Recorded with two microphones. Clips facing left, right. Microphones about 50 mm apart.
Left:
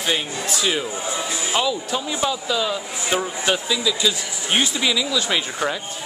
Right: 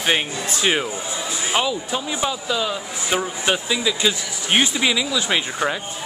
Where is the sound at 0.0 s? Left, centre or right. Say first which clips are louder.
Right 2 dB; right.